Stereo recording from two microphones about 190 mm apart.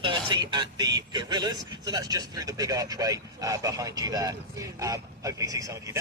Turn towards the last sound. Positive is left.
turn(degrees=-15)  # may be behind; listen again after turning